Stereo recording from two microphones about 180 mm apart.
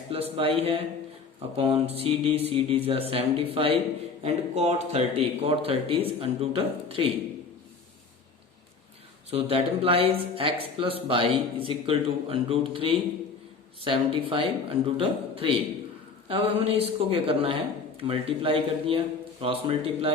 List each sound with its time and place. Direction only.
0.1 s speech: 30° right (ahead or behind)
9.3 s speech: 30° right (ahead or behind)